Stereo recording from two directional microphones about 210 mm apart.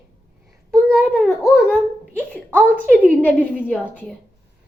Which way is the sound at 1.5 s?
Centre (ahead or behind).